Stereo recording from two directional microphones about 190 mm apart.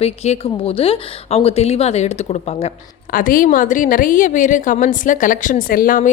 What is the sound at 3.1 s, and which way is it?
A woman's voice, 50° left (ahead or behind).